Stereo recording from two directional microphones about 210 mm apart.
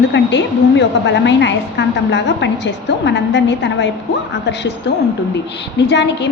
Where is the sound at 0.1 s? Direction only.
55° left (ahead or behind).